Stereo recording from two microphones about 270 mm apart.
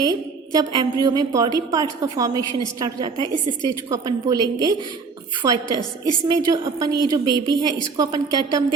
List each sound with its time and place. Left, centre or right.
0.0 s a woman's voice: centre